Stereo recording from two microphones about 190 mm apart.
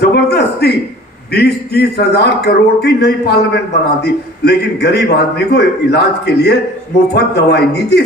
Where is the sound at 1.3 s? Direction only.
60° left (ahead or behind).